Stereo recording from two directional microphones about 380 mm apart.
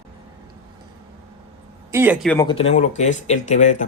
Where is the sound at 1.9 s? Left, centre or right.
Centre.